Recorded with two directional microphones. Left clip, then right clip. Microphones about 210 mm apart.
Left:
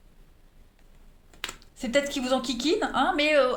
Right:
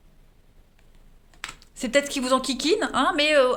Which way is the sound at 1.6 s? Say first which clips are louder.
Right 3 dB; 45° right (ahead or behind).